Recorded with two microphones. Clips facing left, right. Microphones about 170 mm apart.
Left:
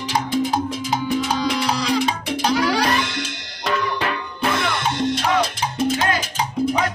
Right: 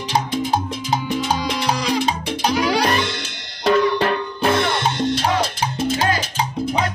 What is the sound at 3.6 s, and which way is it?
Music, 35° right (ahead or behind).